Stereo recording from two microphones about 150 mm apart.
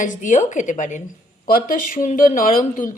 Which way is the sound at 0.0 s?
60° left (ahead or behind).